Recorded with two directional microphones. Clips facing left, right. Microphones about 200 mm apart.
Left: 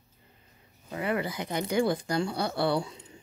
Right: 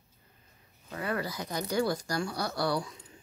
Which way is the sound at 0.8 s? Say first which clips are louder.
Left 3 dB; 20° left (ahead or behind).